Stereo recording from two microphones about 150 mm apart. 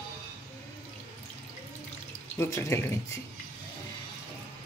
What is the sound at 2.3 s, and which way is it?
Speech, 20° left (ahead or behind).